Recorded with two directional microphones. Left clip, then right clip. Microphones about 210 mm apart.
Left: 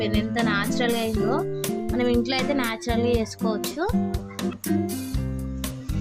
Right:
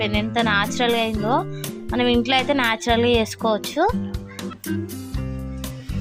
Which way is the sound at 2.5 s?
20° right (ahead or behind).